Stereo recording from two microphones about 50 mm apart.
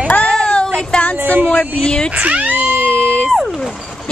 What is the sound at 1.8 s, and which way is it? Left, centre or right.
Vehicle, centre.